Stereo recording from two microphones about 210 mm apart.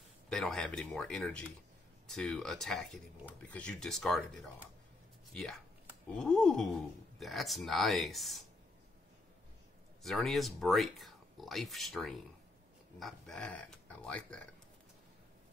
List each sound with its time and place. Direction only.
0.3 s speech: centre (ahead or behind)
10.0 s speech: centre (ahead or behind)